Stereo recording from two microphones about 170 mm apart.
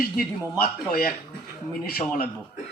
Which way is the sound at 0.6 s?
60° left (ahead or behind).